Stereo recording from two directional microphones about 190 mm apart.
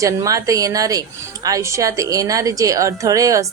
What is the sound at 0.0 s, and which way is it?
A woman's voice, 15° right (ahead or behind).